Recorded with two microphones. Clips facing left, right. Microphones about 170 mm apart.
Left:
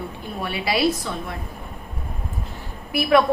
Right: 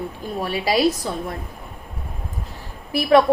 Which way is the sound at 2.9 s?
35° right (ahead or behind).